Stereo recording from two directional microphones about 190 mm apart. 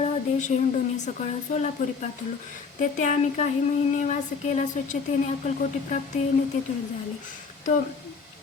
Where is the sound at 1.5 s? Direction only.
40° left (ahead or behind).